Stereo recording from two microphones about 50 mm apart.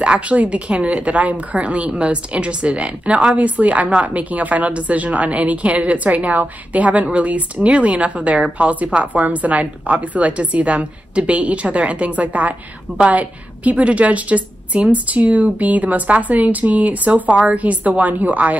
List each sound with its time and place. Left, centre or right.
0.0 s a woman's voice: right